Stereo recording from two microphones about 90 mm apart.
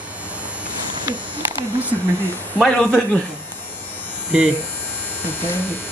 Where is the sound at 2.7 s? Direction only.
15° left (ahead or behind).